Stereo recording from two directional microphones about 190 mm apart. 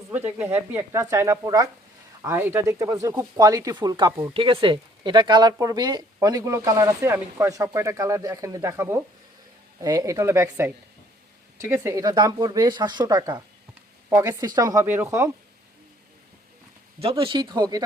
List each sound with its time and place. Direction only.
0.3 s speech: 10° right (ahead or behind)
17.0 s speech: 30° right (ahead or behind)